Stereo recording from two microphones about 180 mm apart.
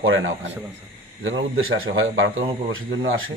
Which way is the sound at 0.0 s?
90° right.